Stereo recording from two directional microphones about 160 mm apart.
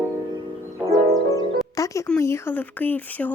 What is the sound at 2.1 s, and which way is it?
A woman's voice, 15° left (ahead or behind).